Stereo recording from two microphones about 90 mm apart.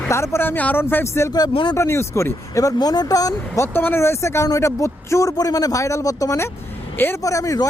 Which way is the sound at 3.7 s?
25° left (ahead or behind).